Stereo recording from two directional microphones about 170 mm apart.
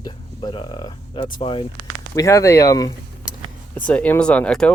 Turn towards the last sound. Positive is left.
turn(degrees=5)  # may be behind; listen again after turning